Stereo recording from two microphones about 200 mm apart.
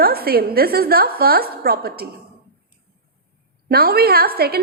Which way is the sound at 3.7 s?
50° right (ahead or behind).